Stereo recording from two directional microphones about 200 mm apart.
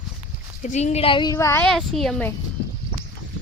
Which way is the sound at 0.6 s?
35° left (ahead or behind).